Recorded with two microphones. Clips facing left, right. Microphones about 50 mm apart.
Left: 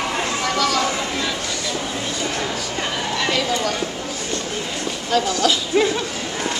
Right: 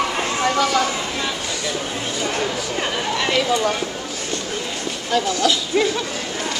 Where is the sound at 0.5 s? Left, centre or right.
Right.